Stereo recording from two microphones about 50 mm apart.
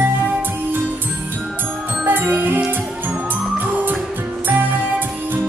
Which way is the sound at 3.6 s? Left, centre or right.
Right.